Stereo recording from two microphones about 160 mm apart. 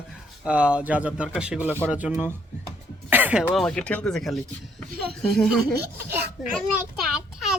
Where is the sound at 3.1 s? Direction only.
10° right (ahead or behind).